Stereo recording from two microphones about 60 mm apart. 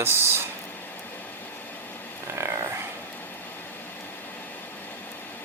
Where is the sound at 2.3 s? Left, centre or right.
Right.